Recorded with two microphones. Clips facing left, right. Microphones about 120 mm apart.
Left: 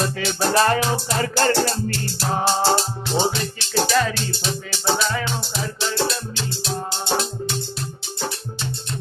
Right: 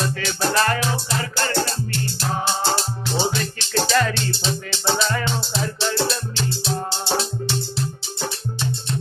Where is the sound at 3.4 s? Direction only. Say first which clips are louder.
Left 1 dB; 10° left (ahead or behind).